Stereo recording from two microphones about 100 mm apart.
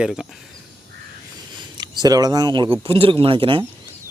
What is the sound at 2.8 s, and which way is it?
Speech, 65° right (ahead or behind).